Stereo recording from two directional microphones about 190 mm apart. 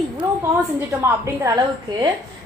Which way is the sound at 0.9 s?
15° right (ahead or behind).